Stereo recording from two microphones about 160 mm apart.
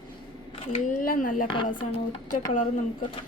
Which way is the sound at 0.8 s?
55° left (ahead or behind).